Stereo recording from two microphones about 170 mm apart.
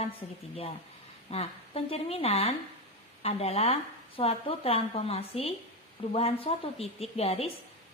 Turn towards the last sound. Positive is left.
turn(degrees=35)  # may be behind; listen again after turning